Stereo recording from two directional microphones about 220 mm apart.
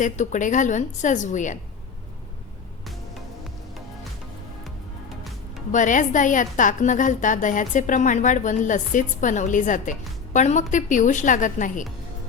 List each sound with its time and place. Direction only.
0.0 s a woman's voice: 35° left (ahead or behind)
5.0 s music: centre (ahead or behind)
5.7 s a woman's voice: 35° left (ahead or behind)